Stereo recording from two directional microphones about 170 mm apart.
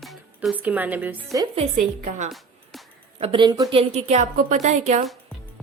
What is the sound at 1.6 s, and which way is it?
Speech, 45° right (ahead or behind).